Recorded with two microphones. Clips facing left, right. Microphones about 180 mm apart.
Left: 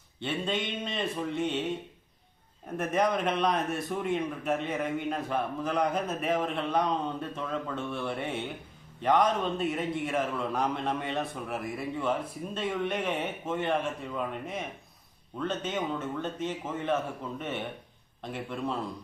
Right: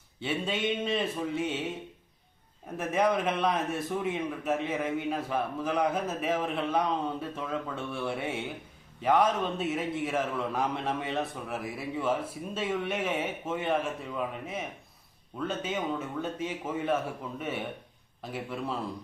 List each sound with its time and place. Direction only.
0.2 s a man's voice: 10° right (ahead or behind)
2.7 s a man's voice: 5° right (ahead or behind)